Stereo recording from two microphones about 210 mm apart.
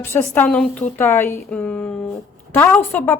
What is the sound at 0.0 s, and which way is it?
A woman's voice, 10° left (ahead or behind).